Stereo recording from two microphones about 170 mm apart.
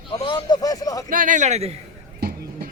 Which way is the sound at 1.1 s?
50° right (ahead or behind).